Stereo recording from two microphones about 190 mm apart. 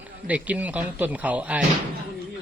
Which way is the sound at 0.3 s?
5° right (ahead or behind).